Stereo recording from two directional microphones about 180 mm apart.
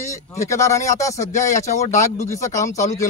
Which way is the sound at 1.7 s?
40° left (ahead or behind).